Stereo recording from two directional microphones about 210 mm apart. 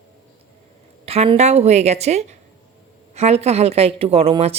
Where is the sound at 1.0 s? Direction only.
30° right (ahead or behind).